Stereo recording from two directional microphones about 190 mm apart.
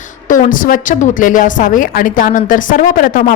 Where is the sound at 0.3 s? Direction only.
45° left (ahead or behind).